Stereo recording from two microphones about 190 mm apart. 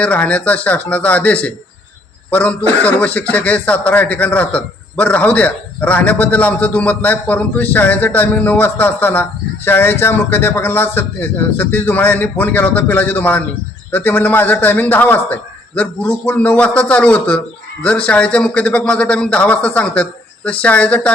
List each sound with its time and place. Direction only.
0.0 s a man's voice: 5° left (ahead or behind)